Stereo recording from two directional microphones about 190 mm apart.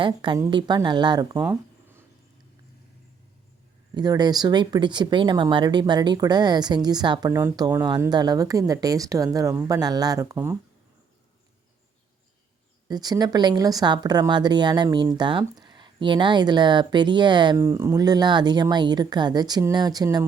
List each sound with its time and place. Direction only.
0.0 s speech: 25° right (ahead or behind)
1.4 s a sound: 10° right (ahead or behind)
3.9 s speech: 20° right (ahead or behind)
10.3 s speech: 10° right (ahead or behind)
12.9 s speech: 20° right (ahead or behind)